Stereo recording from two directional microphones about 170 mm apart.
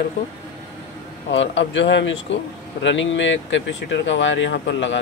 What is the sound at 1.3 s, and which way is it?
A man's voice, 90° left.